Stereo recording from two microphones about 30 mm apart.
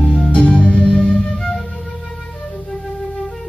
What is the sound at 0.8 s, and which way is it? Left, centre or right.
Music, left.